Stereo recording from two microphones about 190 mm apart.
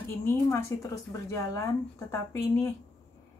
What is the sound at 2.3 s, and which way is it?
Speech, 20° left (ahead or behind).